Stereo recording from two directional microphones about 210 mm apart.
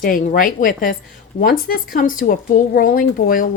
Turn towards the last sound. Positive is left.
turn(degrees=40)  # may be behind; listen again after turning